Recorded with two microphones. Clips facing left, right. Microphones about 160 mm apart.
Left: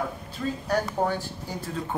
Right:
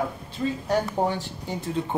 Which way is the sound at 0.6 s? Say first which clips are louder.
Right 1 dB; 20° right (ahead or behind).